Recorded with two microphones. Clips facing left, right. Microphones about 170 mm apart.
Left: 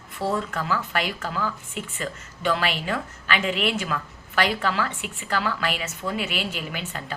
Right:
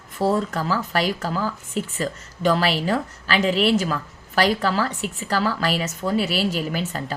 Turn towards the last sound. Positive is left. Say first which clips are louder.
# right 6 dB
turn(degrees=-40)  # may be behind; listen again after turning